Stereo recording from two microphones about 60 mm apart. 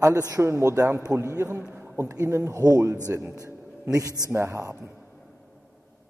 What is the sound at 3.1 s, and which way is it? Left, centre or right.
Speech, right.